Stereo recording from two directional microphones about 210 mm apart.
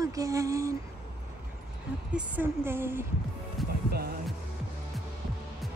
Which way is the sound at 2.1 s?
10° right (ahead or behind).